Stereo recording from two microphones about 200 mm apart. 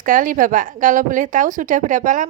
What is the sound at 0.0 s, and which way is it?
A woman's voice, 40° right (ahead or behind).